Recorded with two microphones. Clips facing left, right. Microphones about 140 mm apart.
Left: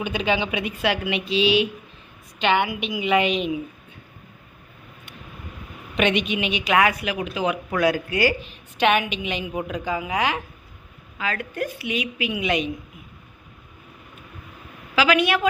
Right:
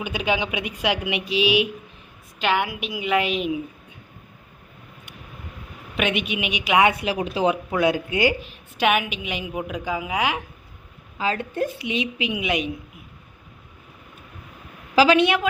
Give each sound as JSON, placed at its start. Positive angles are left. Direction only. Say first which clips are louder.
{"t": 0.0, "sound": "a woman's voice", "louder": "left 1 dB", "side_deg": -10}
{"t": 2.4, "sound": "a woman's voice", "louder": "left 2 dB", "side_deg": 0}
{"t": 6.0, "sound": "a woman's voice", "louder": "left 3 dB", "side_deg": -5}
{"t": 6.8, "sound": "speech", "louder": "right 2 dB", "side_deg": -30}
{"t": 7.7, "sound": "a woman's voice", "louder": "even", "side_deg": -20}
{"t": 8.4, "sound": "a woman's voice", "louder": "left 2 dB", "side_deg": -5}
{"t": 11.2, "sound": "a woman's voice", "louder": "right 3 dB", "side_deg": -30}
{"t": 14.9, "sound": "a woman's voice", "louder": "right 3 dB", "side_deg": -30}